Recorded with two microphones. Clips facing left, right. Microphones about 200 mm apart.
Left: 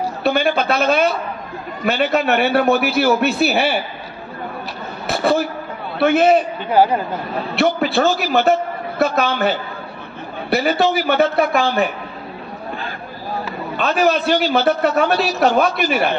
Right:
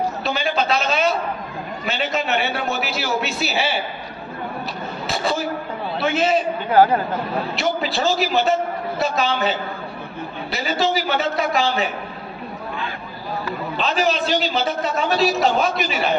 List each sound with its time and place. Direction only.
0.2 s a man's voice: 55° left (ahead or behind)
5.0 s a woman's voice: 60° left (ahead or behind)
7.5 s a man's voice: 60° left (ahead or behind)
13.7 s a man's voice: 60° left (ahead or behind)